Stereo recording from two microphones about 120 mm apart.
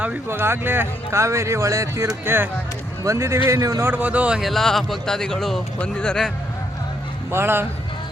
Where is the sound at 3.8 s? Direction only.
15° right (ahead or behind); by 6.3 s 5° left (ahead or behind).